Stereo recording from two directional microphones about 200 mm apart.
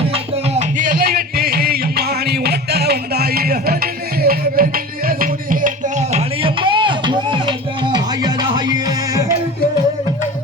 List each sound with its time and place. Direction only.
0.1 s music: 35° right (ahead or behind); by 9.2 s 20° right (ahead or behind)